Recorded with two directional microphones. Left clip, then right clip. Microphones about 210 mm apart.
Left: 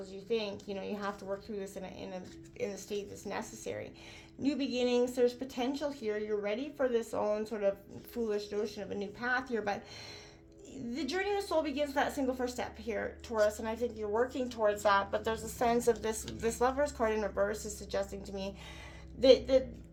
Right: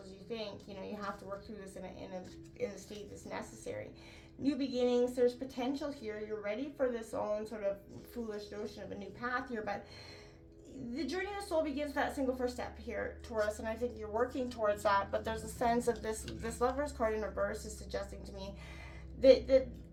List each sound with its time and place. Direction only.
0.3 s a woman's voice: 40° left (ahead or behind)
10.9 s a woman's voice: 40° left (ahead or behind)